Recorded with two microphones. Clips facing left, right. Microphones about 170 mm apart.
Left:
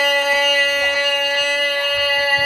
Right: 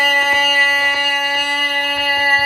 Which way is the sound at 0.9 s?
55° right (ahead or behind).